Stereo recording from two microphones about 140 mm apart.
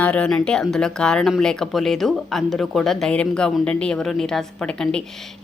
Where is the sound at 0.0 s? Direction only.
10° left (ahead or behind).